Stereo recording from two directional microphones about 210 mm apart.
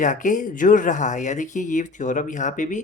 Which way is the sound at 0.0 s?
35° left (ahead or behind).